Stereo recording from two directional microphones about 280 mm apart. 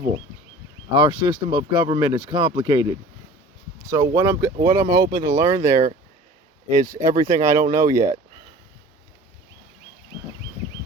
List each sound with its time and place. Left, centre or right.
0.9 s speech: centre
4.8 s speech: right
5.1 s speech: centre
6.8 s speech: centre